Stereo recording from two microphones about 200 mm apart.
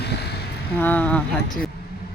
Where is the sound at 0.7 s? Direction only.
10° left (ahead or behind).